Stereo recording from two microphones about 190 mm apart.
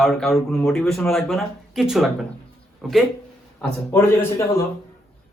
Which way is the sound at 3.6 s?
10° left (ahead or behind).